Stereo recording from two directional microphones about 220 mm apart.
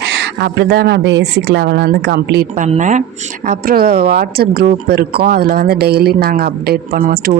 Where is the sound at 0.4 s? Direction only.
50° right (ahead or behind).